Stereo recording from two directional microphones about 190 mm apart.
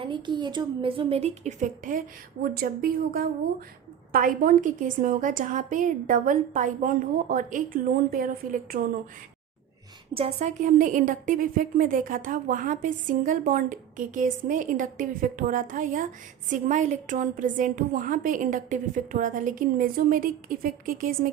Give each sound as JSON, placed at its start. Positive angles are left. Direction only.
{"t": 0.0, "sound": "a woman's voice", "side_deg": -25}
{"t": 10.2, "sound": "a woman's voice", "side_deg": -35}